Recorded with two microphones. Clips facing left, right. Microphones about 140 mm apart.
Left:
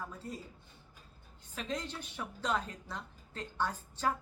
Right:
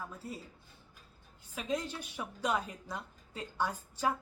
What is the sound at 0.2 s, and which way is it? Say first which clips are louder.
Speech: even; 5° right (ahead or behind).